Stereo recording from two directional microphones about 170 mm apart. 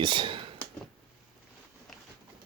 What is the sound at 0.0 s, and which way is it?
Speech, 30° right (ahead or behind).